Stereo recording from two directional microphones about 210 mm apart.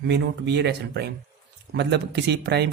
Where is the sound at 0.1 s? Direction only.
55° right (ahead or behind).